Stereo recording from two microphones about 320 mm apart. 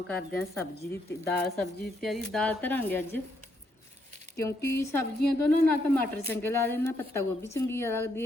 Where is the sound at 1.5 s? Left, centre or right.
Left.